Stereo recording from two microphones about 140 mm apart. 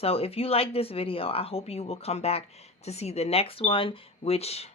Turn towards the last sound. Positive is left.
turn(degrees=50)  # may be behind; listen again after turning